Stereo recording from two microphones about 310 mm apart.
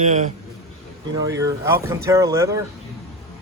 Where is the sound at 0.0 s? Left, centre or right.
Right.